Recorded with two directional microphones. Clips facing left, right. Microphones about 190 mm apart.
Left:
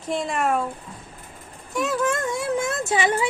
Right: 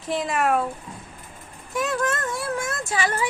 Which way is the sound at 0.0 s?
Centre (ahead or behind).